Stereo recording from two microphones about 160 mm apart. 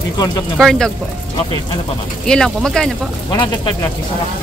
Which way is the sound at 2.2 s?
5° left (ahead or behind).